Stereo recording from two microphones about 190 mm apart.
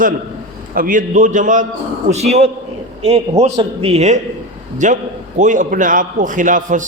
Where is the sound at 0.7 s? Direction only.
45° right (ahead or behind).